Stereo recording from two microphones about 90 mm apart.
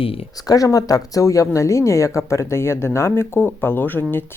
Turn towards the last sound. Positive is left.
turn(degrees=25)  # may be behind; listen again after turning